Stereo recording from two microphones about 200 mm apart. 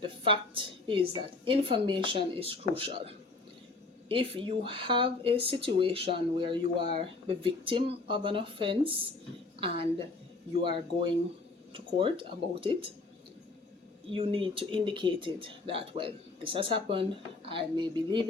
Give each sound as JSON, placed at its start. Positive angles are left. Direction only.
{"t": 0.0, "sound": "speech", "side_deg": -25}
{"t": 10.6, "sound": "speech", "side_deg": -25}
{"t": 14.1, "sound": "speech", "side_deg": -25}